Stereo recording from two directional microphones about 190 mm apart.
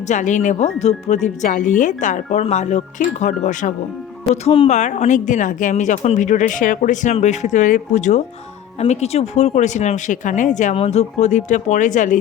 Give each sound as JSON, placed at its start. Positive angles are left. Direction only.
{"t": 0.1, "sound": "a woman's voice", "side_deg": 40}